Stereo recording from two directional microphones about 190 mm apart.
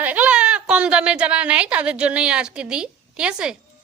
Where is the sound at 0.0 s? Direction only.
10° right (ahead or behind).